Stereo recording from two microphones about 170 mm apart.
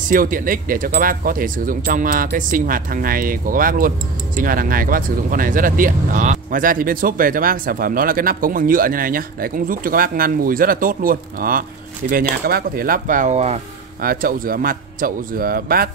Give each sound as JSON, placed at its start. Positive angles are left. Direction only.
{"t": 0.0, "sound": "speech", "side_deg": -55}
{"t": 14.0, "sound": "speech", "side_deg": -60}